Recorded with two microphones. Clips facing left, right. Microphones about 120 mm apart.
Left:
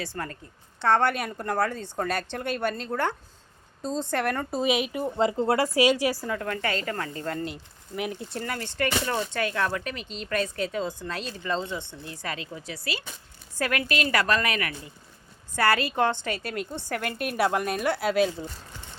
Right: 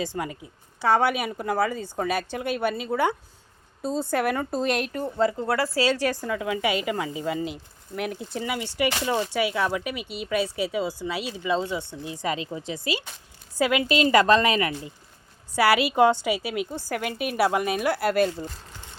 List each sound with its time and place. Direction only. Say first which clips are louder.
0.0 s speech: right 4 dB; 15° right (ahead or behind); by 5.1 s 10° left (ahead or behind)
5.1 s a woman's voice: even; 25° left (ahead or behind); by 14.9 s 25° right (ahead or behind)
15.5 s speech: right 4 dB; 10° right (ahead or behind)